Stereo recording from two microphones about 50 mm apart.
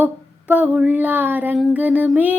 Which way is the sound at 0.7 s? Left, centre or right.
Right.